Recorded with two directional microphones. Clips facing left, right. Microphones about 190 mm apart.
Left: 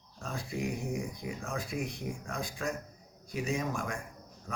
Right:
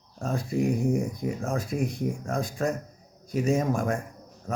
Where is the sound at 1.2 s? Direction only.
45° right (ahead or behind).